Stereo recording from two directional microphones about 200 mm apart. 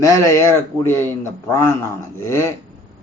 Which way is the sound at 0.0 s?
15° left (ahead or behind).